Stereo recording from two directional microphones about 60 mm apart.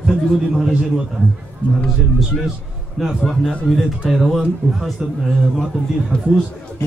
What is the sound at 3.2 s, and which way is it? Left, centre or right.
A man's voice, centre.